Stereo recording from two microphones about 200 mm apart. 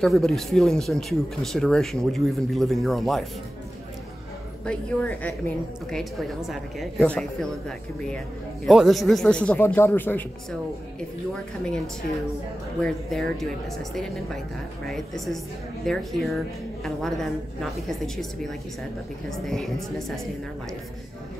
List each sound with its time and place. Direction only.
0.0 s speech: centre (ahead or behind)
4.6 s a woman's voice: 5° left (ahead or behind)
12.8 s speech: centre (ahead or behind)
14.9 s speech: centre (ahead or behind)
19.2 s speech: centre (ahead or behind)